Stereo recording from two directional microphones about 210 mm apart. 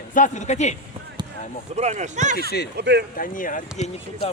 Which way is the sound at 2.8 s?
55° right (ahead or behind).